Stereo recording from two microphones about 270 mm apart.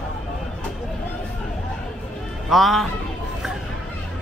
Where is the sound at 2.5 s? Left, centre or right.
Centre.